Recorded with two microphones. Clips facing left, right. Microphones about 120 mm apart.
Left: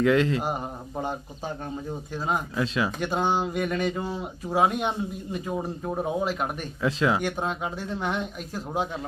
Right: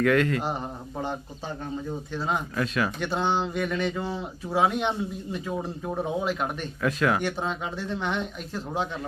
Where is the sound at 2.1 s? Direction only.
10° left (ahead or behind).